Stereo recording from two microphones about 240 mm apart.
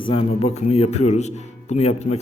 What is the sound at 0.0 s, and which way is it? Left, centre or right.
A man's voice, left.